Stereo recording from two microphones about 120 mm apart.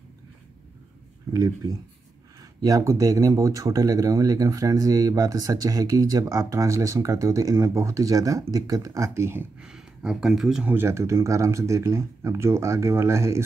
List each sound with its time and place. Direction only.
1.3 s speech: 30° right (ahead or behind)
9.6 s speech: 5° right (ahead or behind)
10.7 s speech: 20° right (ahead or behind)